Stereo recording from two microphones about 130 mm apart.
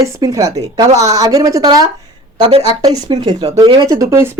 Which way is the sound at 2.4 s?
40° right (ahead or behind).